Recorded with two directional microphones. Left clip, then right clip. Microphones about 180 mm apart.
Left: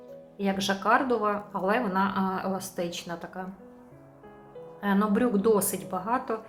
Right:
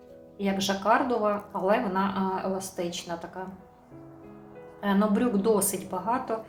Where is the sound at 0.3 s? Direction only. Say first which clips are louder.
Even; 30° left (ahead or behind).